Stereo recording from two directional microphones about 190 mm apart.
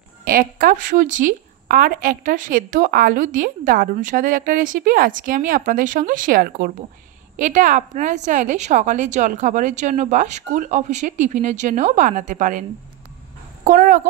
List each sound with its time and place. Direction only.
0.2 s a woman's voice: 50° right (ahead or behind)
13.7 s speech: 45° right (ahead or behind)